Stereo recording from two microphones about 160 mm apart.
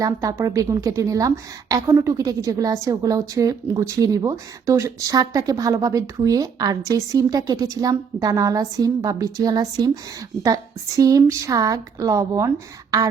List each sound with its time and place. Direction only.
0.0 s a woman's voice: 20° right (ahead or behind)